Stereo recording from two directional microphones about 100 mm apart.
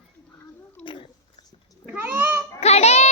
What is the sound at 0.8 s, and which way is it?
Cat, 55° left (ahead or behind).